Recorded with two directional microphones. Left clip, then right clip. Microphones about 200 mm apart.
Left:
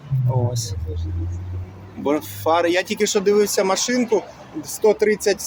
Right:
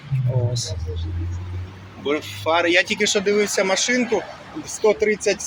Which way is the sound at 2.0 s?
25° left (ahead or behind).